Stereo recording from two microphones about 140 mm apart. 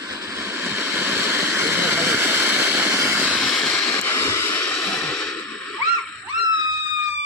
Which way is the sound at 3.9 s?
15° left (ahead or behind).